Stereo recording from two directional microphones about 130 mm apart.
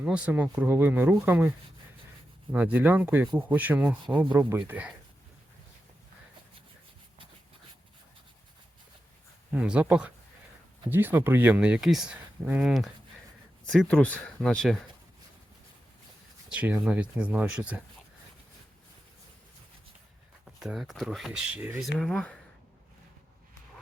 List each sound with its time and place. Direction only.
0.0 s speech: 10° right (ahead or behind)
9.5 s speech: 5° right (ahead or behind)
13.7 s speech: 10° left (ahead or behind)
16.5 s speech: 10° right (ahead or behind)
20.4 s speech: 5° right (ahead or behind)
21.8 s speech: centre (ahead or behind)